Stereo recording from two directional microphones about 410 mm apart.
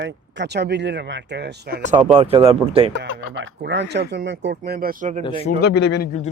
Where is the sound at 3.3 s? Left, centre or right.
Right.